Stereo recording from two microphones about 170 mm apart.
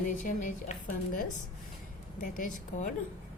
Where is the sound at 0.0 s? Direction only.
50° left (ahead or behind).